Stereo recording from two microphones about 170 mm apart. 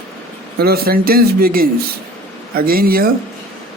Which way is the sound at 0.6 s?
65° right (ahead or behind).